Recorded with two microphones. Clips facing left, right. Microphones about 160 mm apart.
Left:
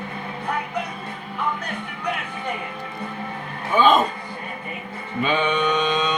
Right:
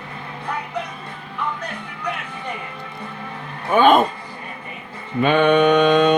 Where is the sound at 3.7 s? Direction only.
60° right (ahead or behind).